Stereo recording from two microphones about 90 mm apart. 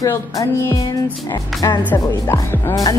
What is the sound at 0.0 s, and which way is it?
Music, 40° left (ahead or behind).